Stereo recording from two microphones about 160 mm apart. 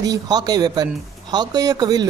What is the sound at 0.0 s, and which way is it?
Speech, 25° right (ahead or behind).